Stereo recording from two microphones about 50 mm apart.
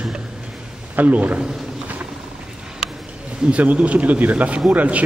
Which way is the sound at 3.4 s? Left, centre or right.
Right.